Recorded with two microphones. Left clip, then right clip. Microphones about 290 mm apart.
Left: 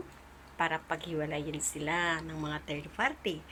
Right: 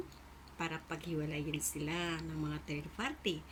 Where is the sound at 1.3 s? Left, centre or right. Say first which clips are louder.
Left 4 dB; left.